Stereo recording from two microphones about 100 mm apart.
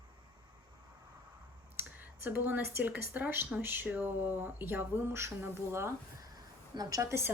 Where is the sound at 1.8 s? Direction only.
20° right (ahead or behind).